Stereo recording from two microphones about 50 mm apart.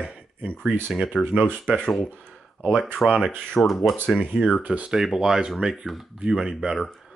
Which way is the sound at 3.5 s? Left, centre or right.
Centre.